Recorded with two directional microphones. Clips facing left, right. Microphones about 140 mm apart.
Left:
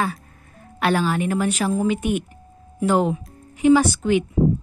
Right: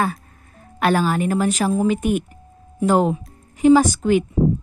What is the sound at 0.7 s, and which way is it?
A woman's voice, 45° right (ahead or behind).